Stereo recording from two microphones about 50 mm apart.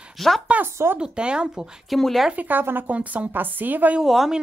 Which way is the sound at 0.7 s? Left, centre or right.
Right.